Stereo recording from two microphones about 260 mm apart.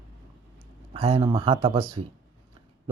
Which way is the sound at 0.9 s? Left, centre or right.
Right.